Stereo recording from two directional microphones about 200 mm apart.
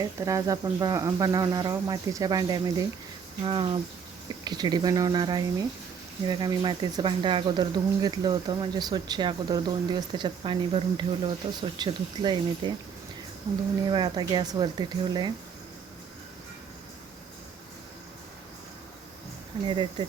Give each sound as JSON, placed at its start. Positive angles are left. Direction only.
{"t": 0.0, "sound": "speech", "side_deg": -15}
{"t": 13.9, "sound": "speech", "side_deg": -20}
{"t": 19.6, "sound": "speech", "side_deg": -25}